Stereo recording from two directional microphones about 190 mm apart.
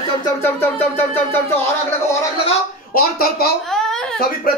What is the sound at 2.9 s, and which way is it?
Speech, 50° left (ahead or behind).